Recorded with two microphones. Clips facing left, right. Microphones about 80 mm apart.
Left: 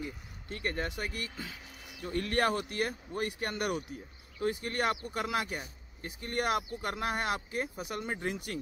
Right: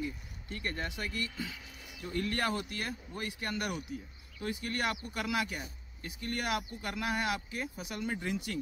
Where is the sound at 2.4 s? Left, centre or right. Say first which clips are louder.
Left 4 dB; left.